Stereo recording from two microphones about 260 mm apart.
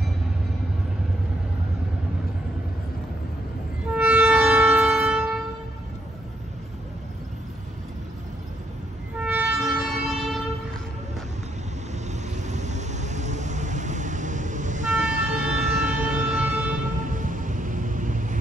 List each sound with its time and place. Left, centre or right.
3.8 s train: centre
9.2 s train: centre
12.1 s vehicle: right
15.3 s music: centre
16.7 s vehicle: right